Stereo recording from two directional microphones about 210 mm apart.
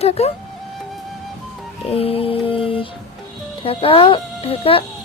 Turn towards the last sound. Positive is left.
turn(degrees=25)  # may be behind; listen again after turning